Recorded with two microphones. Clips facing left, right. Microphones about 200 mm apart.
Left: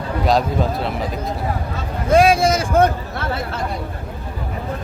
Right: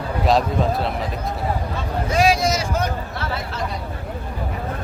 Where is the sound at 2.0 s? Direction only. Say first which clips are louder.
Left 5 dB; 55° left (ahead or behind).